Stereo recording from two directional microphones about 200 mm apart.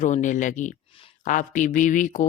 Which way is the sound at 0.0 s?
40° left (ahead or behind).